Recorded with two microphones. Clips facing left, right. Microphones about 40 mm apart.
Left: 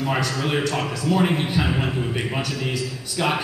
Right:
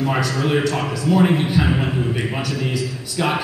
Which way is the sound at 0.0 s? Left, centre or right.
Centre.